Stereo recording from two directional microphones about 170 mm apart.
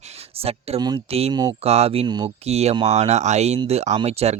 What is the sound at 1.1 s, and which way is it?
Speech, 35° right (ahead or behind).